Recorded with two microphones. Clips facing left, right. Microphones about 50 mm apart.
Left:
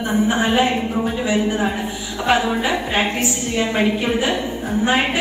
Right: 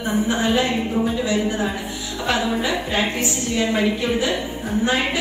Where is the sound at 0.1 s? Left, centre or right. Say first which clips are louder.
Left 2 dB; left.